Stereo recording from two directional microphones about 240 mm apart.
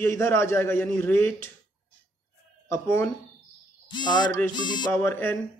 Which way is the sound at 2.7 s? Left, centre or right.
Centre.